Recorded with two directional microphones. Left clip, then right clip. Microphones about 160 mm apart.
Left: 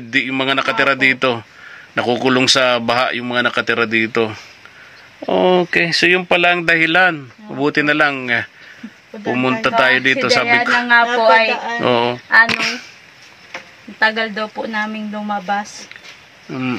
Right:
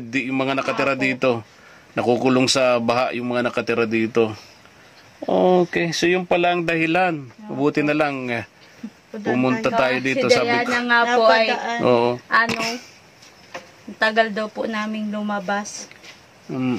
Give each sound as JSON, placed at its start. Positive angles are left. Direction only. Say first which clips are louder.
{"t": 0.1, "sound": "speech", "louder": "left 6 dB", "side_deg": -10}
{"t": 11.0, "sound": "a woman's voice", "louder": "left 2 dB", "side_deg": -25}
{"t": 11.8, "sound": "speech", "louder": "left 1 dB", "side_deg": -10}
{"t": 13.9, "sound": "speech", "louder": "left 2 dB", "side_deg": -55}
{"t": 15.2, "sound": "a woman's voice", "louder": "left 4 dB", "side_deg": -20}